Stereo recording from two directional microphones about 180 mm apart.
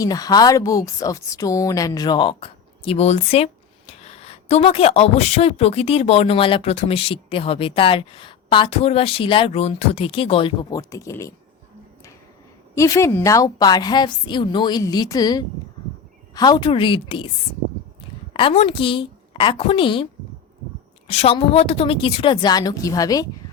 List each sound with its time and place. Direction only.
0.0 s speech: 20° left (ahead or behind)
12.7 s speech: 15° left (ahead or behind)
18.3 s speech: 30° left (ahead or behind)
21.1 s speech: 35° left (ahead or behind)